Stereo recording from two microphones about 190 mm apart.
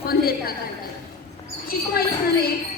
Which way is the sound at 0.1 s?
55° left (ahead or behind).